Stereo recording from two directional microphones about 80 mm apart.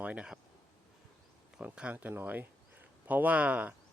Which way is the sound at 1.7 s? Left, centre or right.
Centre.